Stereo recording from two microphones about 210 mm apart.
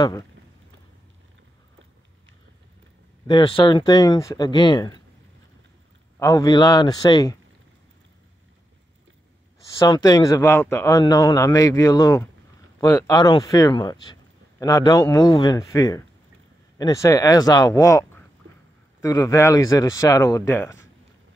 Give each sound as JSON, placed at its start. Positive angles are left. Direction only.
{"t": 3.3, "sound": "speech", "side_deg": 25}
{"t": 6.1, "sound": "speech", "side_deg": 15}
{"t": 9.8, "sound": "speech", "side_deg": 20}